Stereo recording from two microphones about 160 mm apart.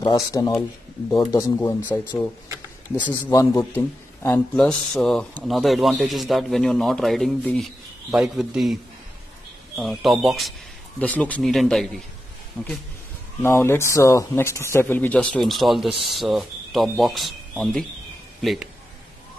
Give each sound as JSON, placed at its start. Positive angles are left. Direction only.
{"t": 0.0, "sound": "speech", "side_deg": 25}
{"t": 3.1, "sound": "speech", "side_deg": 25}
{"t": 4.6, "sound": "speech", "side_deg": 0}
{"t": 9.8, "sound": "speech", "side_deg": 0}
{"t": 13.4, "sound": "speech", "side_deg": 15}